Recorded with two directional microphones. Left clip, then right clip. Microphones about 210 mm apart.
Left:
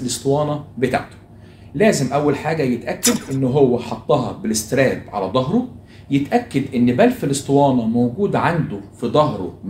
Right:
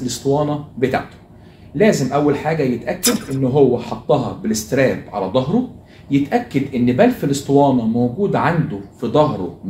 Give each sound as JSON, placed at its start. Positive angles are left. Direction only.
{"t": 0.0, "sound": "speech", "side_deg": 20}
{"t": 3.0, "sound": "speech", "side_deg": 0}
{"t": 3.5, "sound": "speech", "side_deg": 20}